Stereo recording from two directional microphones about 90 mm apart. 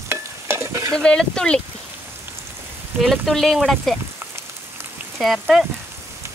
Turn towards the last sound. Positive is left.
turn(degrees=0)  # may be behind; listen again after turning